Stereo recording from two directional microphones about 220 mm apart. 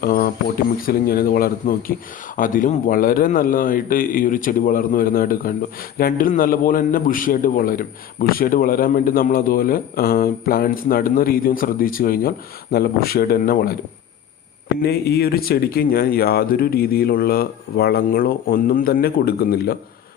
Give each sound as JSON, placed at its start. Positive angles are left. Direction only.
{"t": 0.0, "sound": "a man's voice", "side_deg": 40}
{"t": 14.8, "sound": "a man's voice", "side_deg": 45}